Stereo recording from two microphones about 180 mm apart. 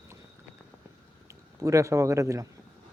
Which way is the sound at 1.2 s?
15° right (ahead or behind).